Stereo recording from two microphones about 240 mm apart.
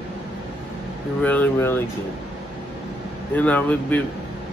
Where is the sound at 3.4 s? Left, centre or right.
Centre.